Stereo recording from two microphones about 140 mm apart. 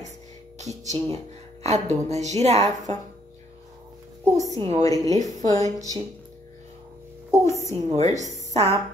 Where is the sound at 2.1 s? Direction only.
55° right (ahead or behind).